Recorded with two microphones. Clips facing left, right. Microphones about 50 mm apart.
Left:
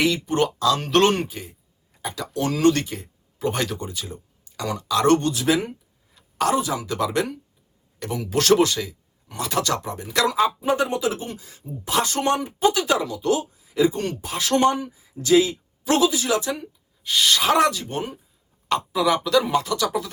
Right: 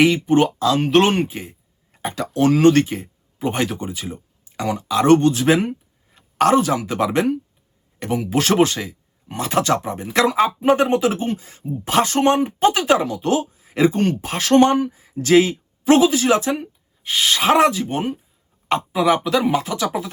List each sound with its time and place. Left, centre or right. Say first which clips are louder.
0.0 s speech: right 6 dB; right
1.3 s speech: right 4 dB; right
1.9 s speech: right 5 dB; right
5.2 s speech: right 5 dB; right
6.1 s a sound: right 6 dB; right
6.7 s speech: right 4 dB; right
8.5 s speech: right 3 dB; right
15.8 s speech: right 6 dB; right